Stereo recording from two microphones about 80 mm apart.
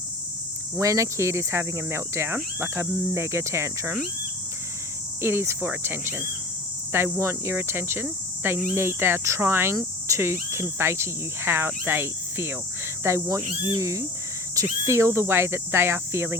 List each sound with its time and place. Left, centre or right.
0.8 s speech: right
5.2 s speech: right